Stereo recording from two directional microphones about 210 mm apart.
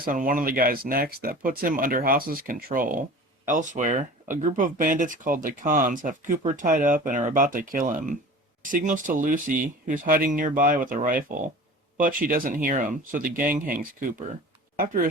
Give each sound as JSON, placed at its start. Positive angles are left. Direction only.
{"t": 0.0, "sound": "speech", "side_deg": -40}